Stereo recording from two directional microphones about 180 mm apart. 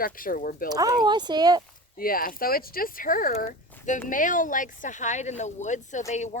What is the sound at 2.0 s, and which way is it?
Speech, 55° left (ahead or behind).